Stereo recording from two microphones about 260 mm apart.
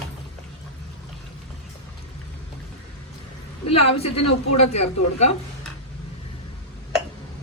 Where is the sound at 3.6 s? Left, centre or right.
Left.